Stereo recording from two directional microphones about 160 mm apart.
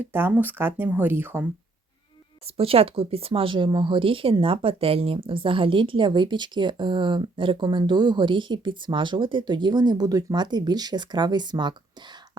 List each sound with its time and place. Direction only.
0.0 s speech: 10° right (ahead or behind)
2.6 s speech: 35° right (ahead or behind)